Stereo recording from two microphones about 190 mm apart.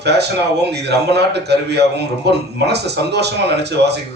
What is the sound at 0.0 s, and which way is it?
Speech, 60° right (ahead or behind).